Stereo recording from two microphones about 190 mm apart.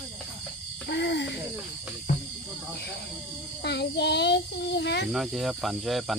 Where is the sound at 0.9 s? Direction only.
65° left (ahead or behind).